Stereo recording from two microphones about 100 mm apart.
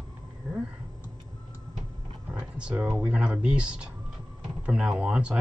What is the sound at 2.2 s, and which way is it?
Vehicle, 10° right (ahead or behind).